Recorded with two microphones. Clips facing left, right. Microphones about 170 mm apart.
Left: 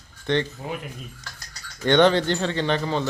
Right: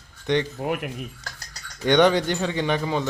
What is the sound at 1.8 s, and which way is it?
Speech, 15° right (ahead or behind).